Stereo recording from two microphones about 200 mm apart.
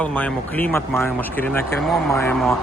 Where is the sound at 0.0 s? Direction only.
10° left (ahead or behind).